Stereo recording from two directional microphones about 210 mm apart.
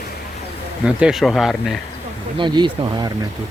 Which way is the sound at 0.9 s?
5° right (ahead or behind).